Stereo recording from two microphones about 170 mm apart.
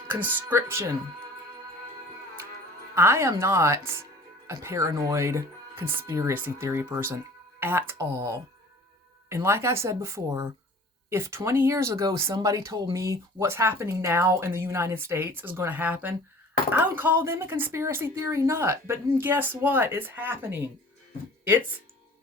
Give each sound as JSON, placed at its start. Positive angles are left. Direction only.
{"t": 0.1, "sound": "speech", "side_deg": -10}
{"t": 2.9, "sound": "speech", "side_deg": -15}